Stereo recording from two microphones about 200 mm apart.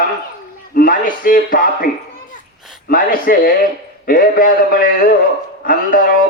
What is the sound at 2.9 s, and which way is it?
A man's voice, 45° left (ahead or behind).